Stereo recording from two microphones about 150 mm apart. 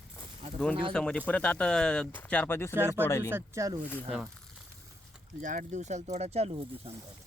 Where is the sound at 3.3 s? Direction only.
20° right (ahead or behind).